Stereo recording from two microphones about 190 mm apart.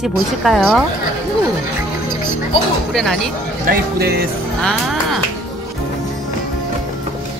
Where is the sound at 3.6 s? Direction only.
55° right (ahead or behind).